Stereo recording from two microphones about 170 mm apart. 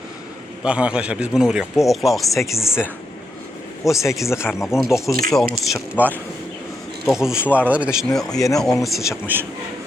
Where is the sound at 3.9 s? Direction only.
Centre (ahead or behind).